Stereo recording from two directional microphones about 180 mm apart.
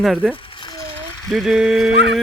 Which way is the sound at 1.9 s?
75° right (ahead or behind).